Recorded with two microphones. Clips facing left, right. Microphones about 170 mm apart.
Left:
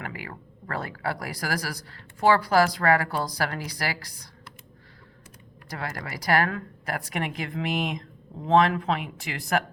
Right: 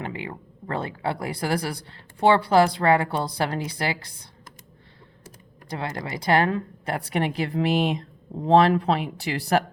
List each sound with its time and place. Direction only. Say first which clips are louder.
0.0 s speech: right 5 dB; 25° right (ahead or behind)
5.6 s speech: right 4 dB; 25° right (ahead or behind)